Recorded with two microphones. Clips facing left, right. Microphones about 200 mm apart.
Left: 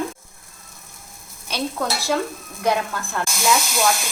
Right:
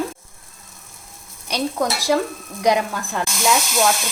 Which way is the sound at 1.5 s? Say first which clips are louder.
Right 3 dB; 15° right (ahead or behind).